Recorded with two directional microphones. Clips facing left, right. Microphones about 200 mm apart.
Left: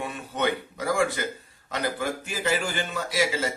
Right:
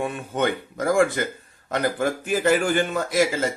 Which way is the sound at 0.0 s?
50° right (ahead or behind).